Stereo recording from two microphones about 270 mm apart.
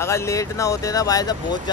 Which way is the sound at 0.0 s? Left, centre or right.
Centre.